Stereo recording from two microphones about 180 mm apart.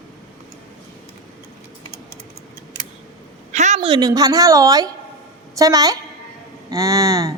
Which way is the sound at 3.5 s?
40° right (ahead or behind).